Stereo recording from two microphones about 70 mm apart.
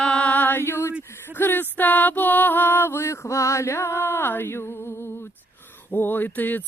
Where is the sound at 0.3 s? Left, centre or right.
Left.